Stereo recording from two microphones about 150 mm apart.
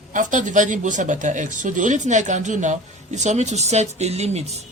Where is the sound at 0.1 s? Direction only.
55° right (ahead or behind).